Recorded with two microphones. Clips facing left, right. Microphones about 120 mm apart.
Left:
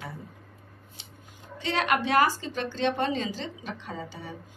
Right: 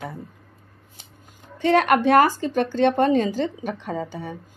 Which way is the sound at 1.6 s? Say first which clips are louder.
Right 9 dB; 50° right (ahead or behind).